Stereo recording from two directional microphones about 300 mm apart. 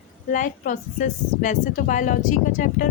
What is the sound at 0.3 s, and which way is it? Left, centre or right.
A woman's voice, left.